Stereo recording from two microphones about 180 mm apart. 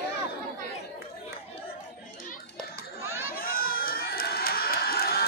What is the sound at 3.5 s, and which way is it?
Crowd, 55° left (ahead or behind).